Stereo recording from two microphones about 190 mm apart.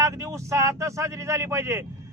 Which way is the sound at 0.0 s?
15° right (ahead or behind).